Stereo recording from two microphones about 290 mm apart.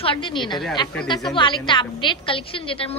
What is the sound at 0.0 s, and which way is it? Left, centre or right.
A woman's voice, centre.